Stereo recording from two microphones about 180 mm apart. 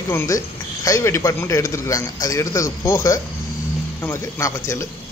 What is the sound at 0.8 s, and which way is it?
A man's voice, 15° left (ahead or behind).